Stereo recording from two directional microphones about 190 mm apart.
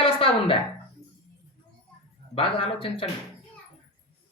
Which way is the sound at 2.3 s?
30° left (ahead or behind).